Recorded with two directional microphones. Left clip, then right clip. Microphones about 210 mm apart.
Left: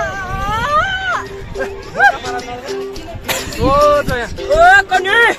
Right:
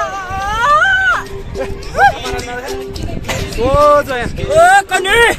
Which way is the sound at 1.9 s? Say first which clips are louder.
Right 1 dB; 55° right (ahead or behind).